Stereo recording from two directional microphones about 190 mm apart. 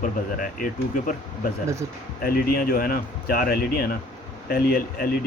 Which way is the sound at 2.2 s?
50° left (ahead or behind).